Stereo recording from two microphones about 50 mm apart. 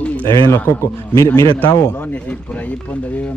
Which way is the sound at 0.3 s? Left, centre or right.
Left.